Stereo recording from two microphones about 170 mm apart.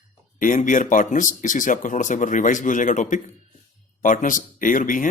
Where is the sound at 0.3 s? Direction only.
50° left (ahead or behind).